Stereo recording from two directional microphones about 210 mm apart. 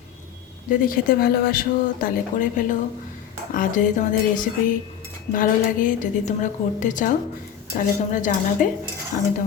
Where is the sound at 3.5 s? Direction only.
35° left (ahead or behind).